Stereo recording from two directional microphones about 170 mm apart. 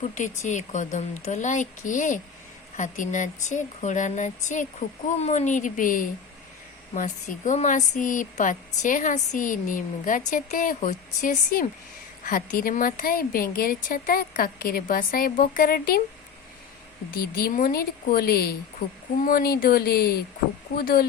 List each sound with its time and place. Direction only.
0.1 s a woman's voice: 45° left (ahead or behind)
17.1 s a woman's voice: 60° left (ahead or behind)